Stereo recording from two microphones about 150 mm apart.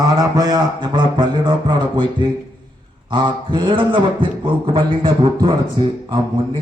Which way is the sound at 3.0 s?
30° right (ahead or behind).